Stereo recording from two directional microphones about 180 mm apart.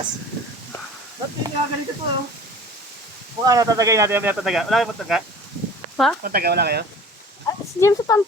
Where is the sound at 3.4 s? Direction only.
20° right (ahead or behind); by 5.2 s centre (ahead or behind).